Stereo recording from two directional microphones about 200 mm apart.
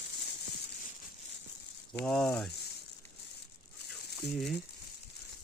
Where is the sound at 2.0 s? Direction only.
5° left (ahead or behind).